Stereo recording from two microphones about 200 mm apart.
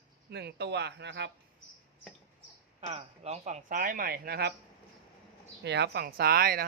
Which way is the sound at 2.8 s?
30° right (ahead or behind).